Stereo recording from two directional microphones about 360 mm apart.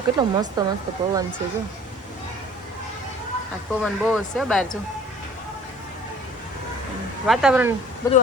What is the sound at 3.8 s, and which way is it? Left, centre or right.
Speech, centre.